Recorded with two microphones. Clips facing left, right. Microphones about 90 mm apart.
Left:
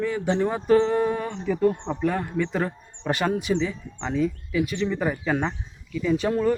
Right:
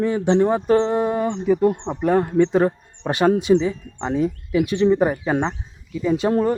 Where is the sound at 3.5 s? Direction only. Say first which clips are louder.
Right 8 dB; 35° right (ahead or behind).